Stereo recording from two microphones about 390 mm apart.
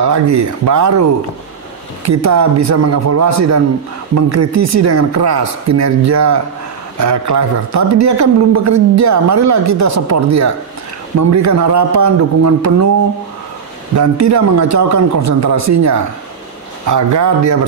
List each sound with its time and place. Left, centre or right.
0.0 s a man's voice: right
2.0 s a man's voice: right
13.9 s a man's voice: right